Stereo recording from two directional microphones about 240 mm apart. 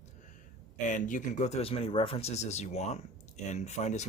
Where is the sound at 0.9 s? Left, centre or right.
Left.